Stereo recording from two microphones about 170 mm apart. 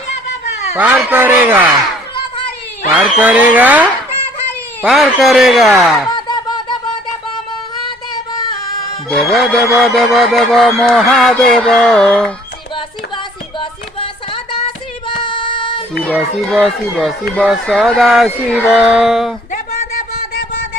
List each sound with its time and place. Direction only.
0.8 s speech: 10° right (ahead or behind)
2.9 s speech: 10° right (ahead or behind)
4.9 s speech: centre (ahead or behind)
6.1 s a sound: 25° left (ahead or behind)
7.9 s child singing: 25° left (ahead or behind)
9.0 s speech: centre (ahead or behind)
13.6 s music: 30° left (ahead or behind)
16.1 s speech: centre (ahead or behind)
19.5 s a sound: 45° left (ahead or behind)